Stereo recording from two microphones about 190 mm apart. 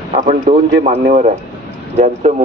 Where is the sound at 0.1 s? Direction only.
40° right (ahead or behind).